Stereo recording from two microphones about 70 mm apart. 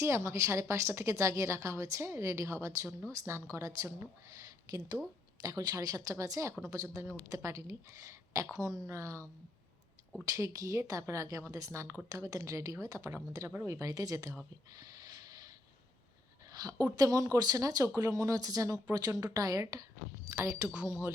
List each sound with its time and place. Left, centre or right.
0.0 s a woman's voice: right
5.4 s a woman's voice: right
10.2 s a woman's voice: right
14.7 s snort: right
16.5 s a sound: right
16.7 s speech: right
20.3 s a woman's voice: right